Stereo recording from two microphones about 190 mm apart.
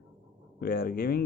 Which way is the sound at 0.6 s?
50° left (ahead or behind).